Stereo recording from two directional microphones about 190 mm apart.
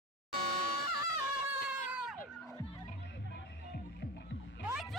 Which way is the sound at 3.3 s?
60° left (ahead or behind).